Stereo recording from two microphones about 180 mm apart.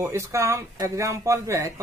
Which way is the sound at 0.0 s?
15° right (ahead or behind).